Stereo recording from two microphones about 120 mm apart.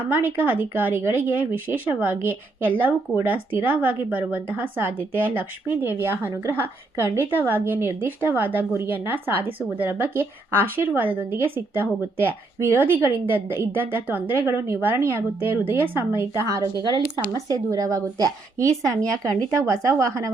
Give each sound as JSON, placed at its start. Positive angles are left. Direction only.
{"t": 0.1, "sound": "a woman's voice", "side_deg": -15}
{"t": 18.8, "sound": "speech", "side_deg": 5}
{"t": 19.5, "sound": "speech", "side_deg": -25}